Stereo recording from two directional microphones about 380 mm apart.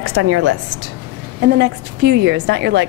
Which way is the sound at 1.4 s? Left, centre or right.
Right.